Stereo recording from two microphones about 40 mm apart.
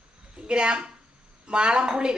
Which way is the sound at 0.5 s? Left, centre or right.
Right.